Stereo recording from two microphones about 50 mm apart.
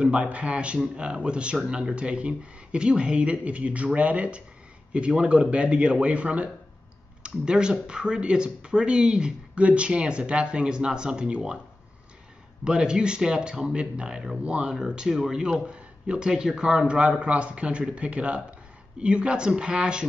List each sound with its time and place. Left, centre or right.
0.0 s speech: right
12.6 s speech: centre
15.6 s speech: centre